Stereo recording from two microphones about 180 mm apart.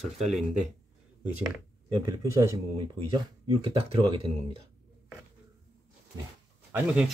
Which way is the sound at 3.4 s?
30° right (ahead or behind).